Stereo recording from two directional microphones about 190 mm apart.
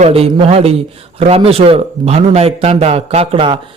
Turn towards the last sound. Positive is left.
turn(degrees=-25)  # may be behind; listen again after turning